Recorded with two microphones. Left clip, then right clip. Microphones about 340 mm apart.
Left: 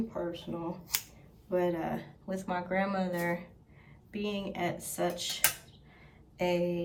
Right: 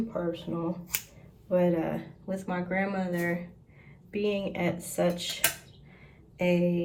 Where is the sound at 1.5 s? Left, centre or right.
Centre.